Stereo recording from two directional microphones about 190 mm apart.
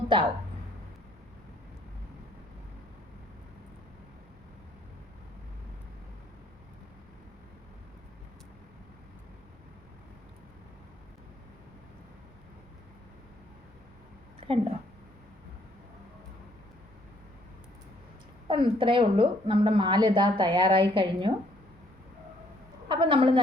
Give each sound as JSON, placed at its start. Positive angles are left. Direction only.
{"t": 14.4, "sound": "a sound", "side_deg": -30}
{"t": 18.4, "sound": "a woman's voice", "side_deg": -25}
{"t": 22.9, "sound": "a woman's voice", "side_deg": -25}